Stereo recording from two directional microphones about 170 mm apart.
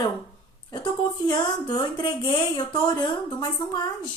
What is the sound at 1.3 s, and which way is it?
Speech, 25° left (ahead or behind).